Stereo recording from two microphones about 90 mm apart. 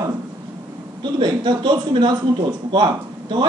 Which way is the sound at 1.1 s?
55° right (ahead or behind).